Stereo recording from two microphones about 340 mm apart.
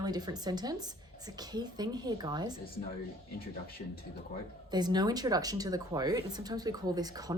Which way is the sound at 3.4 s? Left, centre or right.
Left.